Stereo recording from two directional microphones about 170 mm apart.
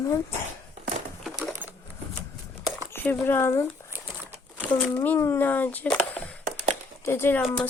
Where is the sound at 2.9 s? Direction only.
10° left (ahead or behind).